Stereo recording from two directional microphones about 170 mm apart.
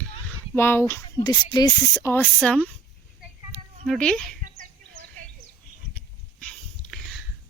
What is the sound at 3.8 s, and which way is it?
Speech, 5° left (ahead or behind).